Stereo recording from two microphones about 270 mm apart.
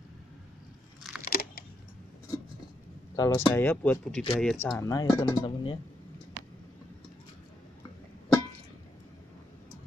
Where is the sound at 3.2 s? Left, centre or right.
Centre.